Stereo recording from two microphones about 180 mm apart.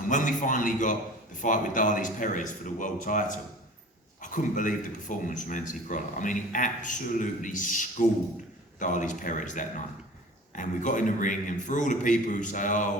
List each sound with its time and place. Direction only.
0.1 s speech: 45° left (ahead or behind)